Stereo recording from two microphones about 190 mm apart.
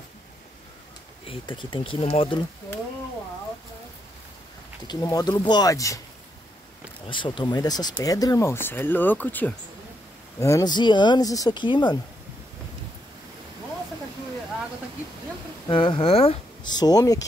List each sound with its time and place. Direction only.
1.2 s speech: 25° left (ahead or behind)
4.8 s speech: 20° left (ahead or behind)
7.1 s speech: 25° left (ahead or behind)
15.7 s speech: 25° left (ahead or behind)